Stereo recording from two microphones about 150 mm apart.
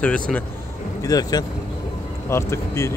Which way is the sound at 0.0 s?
10° left (ahead or behind).